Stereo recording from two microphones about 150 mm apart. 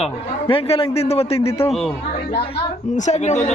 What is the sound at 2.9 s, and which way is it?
Speech, 50° left (ahead or behind).